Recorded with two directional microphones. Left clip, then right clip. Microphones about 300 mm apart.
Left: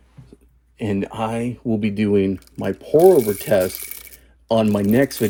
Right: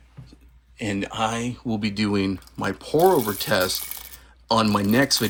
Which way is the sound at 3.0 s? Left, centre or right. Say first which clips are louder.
Left 6 dB; centre.